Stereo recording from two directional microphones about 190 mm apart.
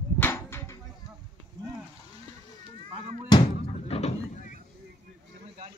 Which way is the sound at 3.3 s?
30° left (ahead or behind).